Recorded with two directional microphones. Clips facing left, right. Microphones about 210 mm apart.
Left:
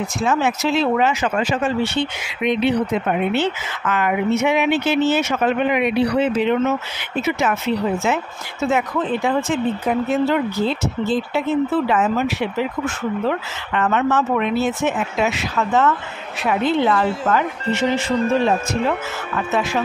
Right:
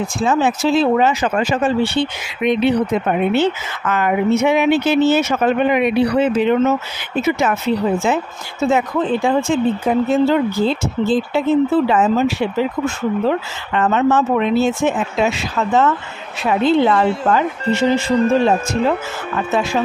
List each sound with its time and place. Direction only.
0.2 s speech: 30° right (ahead or behind)